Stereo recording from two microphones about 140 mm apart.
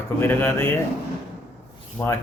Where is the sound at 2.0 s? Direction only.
10° left (ahead or behind).